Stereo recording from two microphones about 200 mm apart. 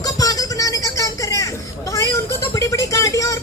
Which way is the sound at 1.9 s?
15° left (ahead or behind).